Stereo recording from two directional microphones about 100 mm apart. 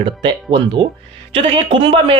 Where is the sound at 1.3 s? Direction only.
65° right (ahead or behind).